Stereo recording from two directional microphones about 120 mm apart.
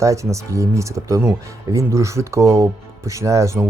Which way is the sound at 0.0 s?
25° right (ahead or behind).